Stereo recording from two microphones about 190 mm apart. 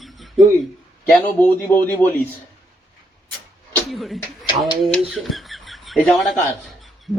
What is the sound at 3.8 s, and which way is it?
A man's voice, centre (ahead or behind).